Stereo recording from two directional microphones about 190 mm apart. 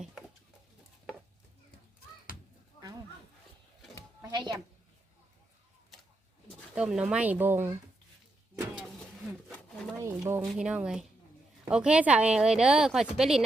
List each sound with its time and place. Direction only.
0.0 s a sound: centre (ahead or behind)
4.2 s music: 20° right (ahead or behind)
6.7 s speech: 5° right (ahead or behind)
10.0 s speech: 15° right (ahead or behind)
10.4 s a woman's voice: 5° right (ahead or behind)